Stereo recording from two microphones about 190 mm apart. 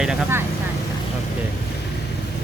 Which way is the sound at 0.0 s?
10° right (ahead or behind).